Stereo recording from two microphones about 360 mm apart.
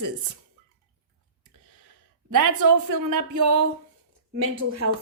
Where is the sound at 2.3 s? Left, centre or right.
Right.